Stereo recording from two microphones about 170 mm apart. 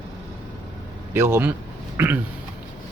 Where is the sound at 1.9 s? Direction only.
10° right (ahead or behind).